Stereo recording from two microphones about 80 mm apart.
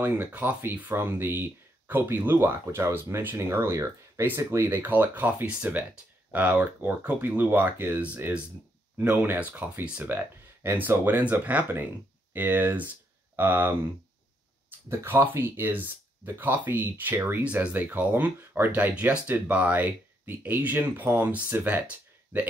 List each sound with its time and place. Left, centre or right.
0.3 s speech: right
14.9 s speech: right